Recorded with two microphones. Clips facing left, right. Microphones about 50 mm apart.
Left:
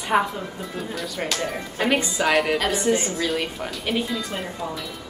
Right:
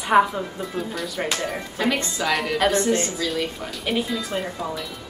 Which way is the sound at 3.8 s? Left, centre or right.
Centre.